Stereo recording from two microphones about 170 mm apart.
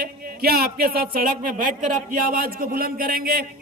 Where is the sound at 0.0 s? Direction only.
65° right (ahead or behind).